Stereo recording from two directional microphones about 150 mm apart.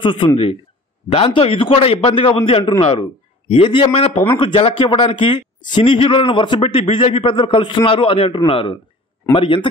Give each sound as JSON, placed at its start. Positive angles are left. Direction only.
{"t": 0.0, "sound": "a man's voice", "side_deg": 35}